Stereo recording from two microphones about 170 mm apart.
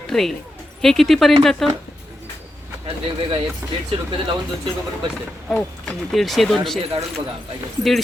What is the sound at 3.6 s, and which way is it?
Speech, 15° right (ahead or behind).